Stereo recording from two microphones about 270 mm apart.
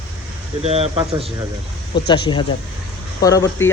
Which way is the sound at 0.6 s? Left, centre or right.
Right.